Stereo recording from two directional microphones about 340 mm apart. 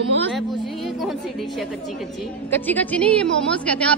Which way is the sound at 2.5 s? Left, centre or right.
Centre.